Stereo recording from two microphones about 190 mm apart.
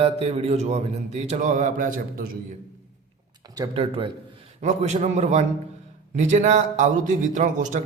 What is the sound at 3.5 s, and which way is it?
Speech, 25° right (ahead or behind).